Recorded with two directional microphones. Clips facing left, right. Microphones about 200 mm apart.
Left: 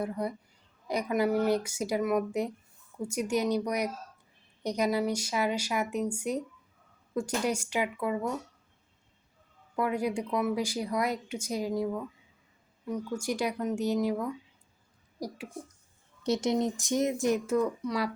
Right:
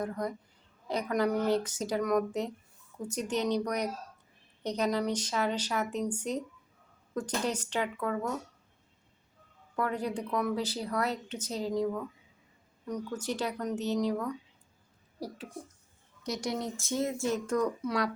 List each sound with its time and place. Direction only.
0.0 s speech: 10° left (ahead or behind)
9.7 s speech: 10° left (ahead or behind)
16.2 s speech: 25° left (ahead or behind); by 18.1 s 5° left (ahead or behind)